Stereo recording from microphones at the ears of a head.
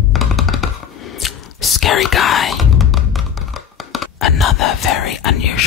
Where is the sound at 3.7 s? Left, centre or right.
Left.